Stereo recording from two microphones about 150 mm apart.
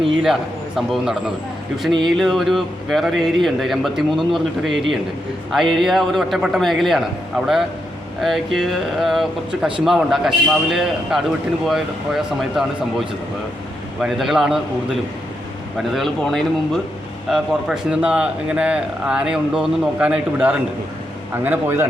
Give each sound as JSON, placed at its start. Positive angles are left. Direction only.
{"t": 0.8, "sound": "a man's voice", "side_deg": 0}
{"t": 15.8, "sound": "a man's voice", "side_deg": 0}